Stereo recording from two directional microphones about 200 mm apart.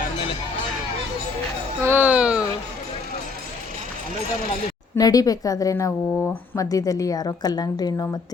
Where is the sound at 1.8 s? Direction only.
10° right (ahead or behind).